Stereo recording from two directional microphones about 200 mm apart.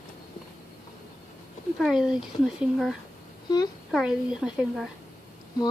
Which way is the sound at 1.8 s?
Centre (ahead or behind).